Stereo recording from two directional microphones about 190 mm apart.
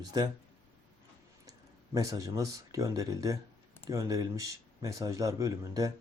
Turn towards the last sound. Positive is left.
turn(degrees=-15)  # may be behind; listen again after turning